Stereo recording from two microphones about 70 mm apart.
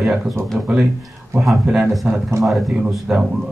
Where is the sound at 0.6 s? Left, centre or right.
Centre.